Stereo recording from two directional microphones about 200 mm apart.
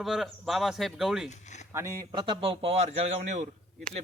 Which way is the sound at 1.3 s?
35° left (ahead or behind).